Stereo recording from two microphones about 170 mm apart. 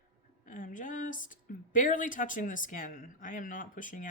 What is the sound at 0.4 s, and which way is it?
A woman's voice, 50° left (ahead or behind).